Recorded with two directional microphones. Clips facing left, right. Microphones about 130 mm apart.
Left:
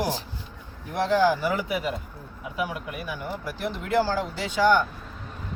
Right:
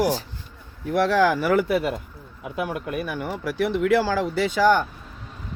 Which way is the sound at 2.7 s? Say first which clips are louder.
Right 6 dB; 65° right (ahead or behind).